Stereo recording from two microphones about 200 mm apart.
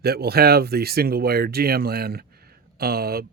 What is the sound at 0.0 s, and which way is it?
Speech, 50° right (ahead or behind).